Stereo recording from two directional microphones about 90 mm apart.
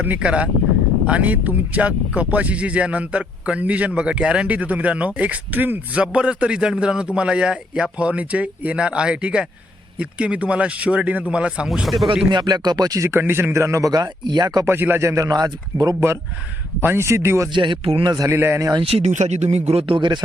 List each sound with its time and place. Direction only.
0.0 s speech: 15° right (ahead or behind)
12.3 s speech: 50° right (ahead or behind)
13.1 s speech: 25° right (ahead or behind); by 14.6 s 50° right (ahead or behind)
14.6 s speech: 25° right (ahead or behind)
15.3 s speech: 45° right (ahead or behind)
16.8 s speech: 25° right (ahead or behind)
17.5 s speech: 70° right (ahead or behind)
18.0 s speech: 45° right (ahead or behind)
18.3 s speech: 30° right (ahead or behind)
18.8 s speech: 90° right
19.7 s speech: 70° right (ahead or behind)